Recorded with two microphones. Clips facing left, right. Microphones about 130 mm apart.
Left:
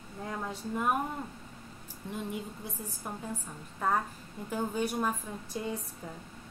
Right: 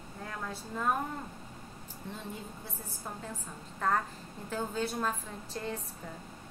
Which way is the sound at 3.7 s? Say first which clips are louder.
Left 1 dB; 10° left (ahead or behind).